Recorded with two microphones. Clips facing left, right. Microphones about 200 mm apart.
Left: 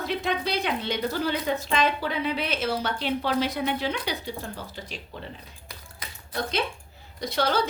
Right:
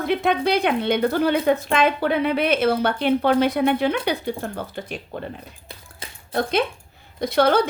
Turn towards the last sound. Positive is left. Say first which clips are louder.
# right 7 dB
turn(degrees=-55)  # may be behind; listen again after turning